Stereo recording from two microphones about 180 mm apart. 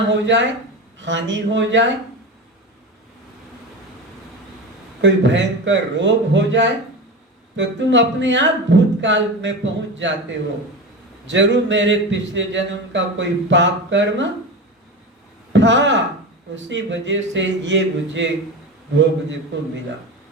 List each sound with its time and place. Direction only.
0.1 s a man's voice: 85° right
4.9 s speech: 90° right
11.3 s speech: 90° right
15.5 s a man's voice: 90° right